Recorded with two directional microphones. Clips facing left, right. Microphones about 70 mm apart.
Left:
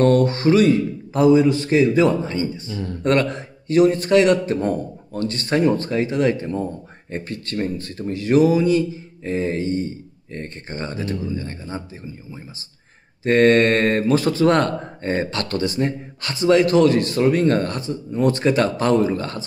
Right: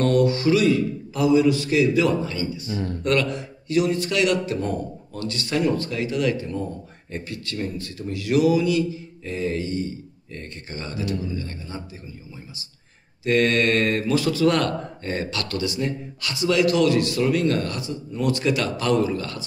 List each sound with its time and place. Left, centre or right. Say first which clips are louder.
0.0 s speech: left 3 dB; left
13.2 s speech: left 6 dB; left